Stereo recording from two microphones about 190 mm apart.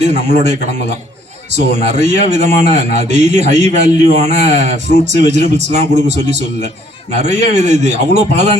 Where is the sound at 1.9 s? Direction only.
35° right (ahead or behind).